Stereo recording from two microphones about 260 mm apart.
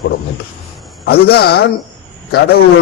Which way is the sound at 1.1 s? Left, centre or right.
Left.